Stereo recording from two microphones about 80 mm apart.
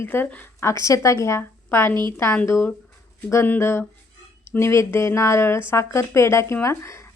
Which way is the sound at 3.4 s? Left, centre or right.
Left.